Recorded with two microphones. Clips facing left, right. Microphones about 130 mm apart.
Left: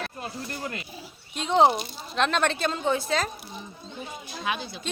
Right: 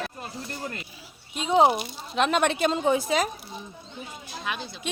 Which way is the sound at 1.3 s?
5° right (ahead or behind).